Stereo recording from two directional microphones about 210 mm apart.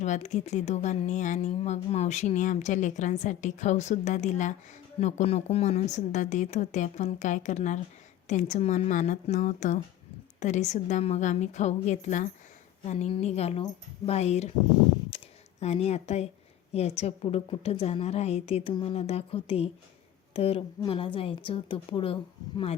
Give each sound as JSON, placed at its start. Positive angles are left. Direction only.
{"t": 0.0, "sound": "speech", "side_deg": 35}
{"t": 15.1, "sound": "a sound", "side_deg": 30}
{"t": 15.6, "sound": "a woman's voice", "side_deg": 30}